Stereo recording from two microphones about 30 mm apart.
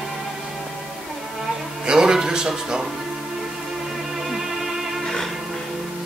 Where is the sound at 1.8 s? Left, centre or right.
Right.